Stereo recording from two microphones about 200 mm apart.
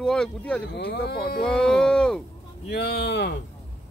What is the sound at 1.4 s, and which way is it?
Speech, 5° left (ahead or behind).